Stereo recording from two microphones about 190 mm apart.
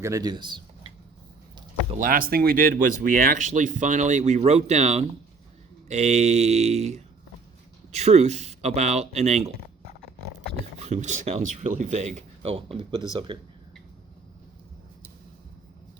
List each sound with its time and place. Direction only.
0.0 s speech: 20° right (ahead or behind)
2.0 s speech: 45° right (ahead or behind)
10.8 s speech: 35° right (ahead or behind)
12.1 s speech: 30° right (ahead or behind)